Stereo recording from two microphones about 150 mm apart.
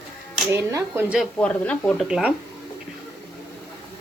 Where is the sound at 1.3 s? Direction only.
10° left (ahead or behind).